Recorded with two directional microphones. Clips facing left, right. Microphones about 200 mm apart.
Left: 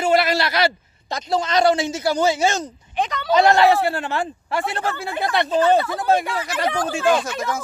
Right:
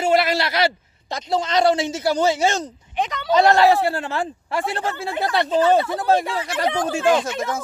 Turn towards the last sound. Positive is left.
turn(degrees=-25)  # may be behind; listen again after turning